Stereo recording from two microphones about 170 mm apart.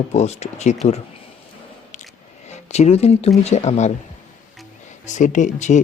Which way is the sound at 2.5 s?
40° left (ahead or behind).